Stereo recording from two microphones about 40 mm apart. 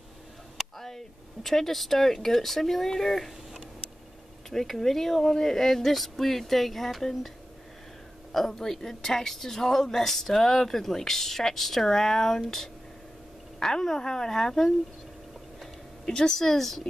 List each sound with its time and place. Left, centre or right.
0.7 s speech: centre
4.5 s speech: centre
16.1 s speech: centre